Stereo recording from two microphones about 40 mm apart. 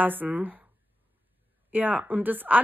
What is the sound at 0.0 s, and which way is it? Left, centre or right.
Speech, right.